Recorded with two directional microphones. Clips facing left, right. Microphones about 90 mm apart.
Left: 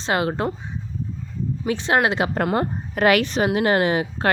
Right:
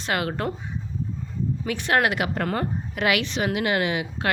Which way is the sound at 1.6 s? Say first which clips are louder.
Left 3 dB; 25° left (ahead or behind).